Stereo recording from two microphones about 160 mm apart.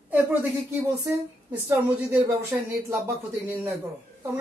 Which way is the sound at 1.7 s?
10° right (ahead or behind).